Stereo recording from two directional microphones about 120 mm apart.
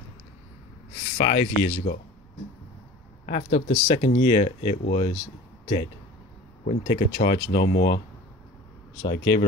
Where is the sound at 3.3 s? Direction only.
90° left; by 5.1 s 65° left (ahead or behind).